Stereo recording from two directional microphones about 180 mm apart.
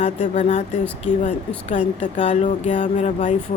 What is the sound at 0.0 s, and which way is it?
Speech, 40° left (ahead or behind).